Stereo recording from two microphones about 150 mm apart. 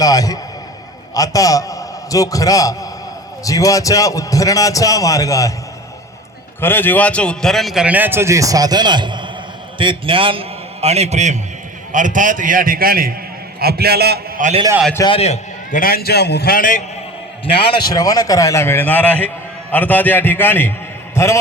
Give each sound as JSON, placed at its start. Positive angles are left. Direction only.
{"t": 0.0, "sound": "a man's voice", "side_deg": 25}
{"t": 6.6, "sound": "a man's voice", "side_deg": 15}
{"t": 13.6, "sound": "a man's voice", "side_deg": -90}
{"t": 15.0, "sound": "a man's voice", "side_deg": 40}
{"t": 15.7, "sound": "a man's voice", "side_deg": 80}
{"t": 17.4, "sound": "a man's voice", "side_deg": 35}